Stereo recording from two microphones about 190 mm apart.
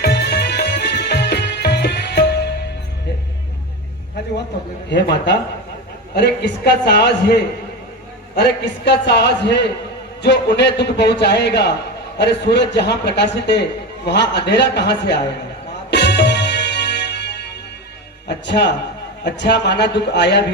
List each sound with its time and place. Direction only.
0.0 s music: 60° left (ahead or behind)
4.9 s a man's voice: 65° left (ahead or behind)
8.4 s a man's voice: 65° left (ahead or behind)
15.9 s music: 65° left (ahead or behind)
18.4 s a man's voice: 65° left (ahead or behind)